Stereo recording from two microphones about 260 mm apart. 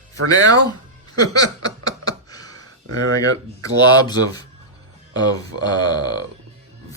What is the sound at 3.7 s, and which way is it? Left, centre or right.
Speech, centre.